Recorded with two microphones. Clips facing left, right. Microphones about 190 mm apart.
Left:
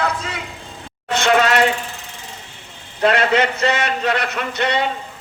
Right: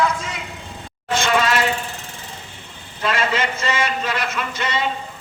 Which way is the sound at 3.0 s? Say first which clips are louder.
Left 6 dB; 60° left (ahead or behind).